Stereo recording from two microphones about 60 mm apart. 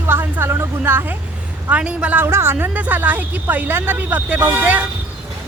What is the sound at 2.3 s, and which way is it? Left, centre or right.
Speech, right.